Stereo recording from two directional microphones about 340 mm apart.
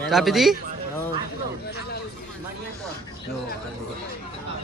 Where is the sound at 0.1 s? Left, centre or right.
Centre.